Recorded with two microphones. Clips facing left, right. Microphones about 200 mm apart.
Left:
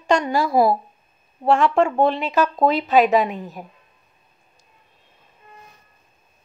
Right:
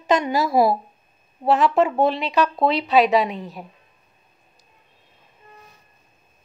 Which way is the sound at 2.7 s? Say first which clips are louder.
Left 1 dB; 40° left (ahead or behind).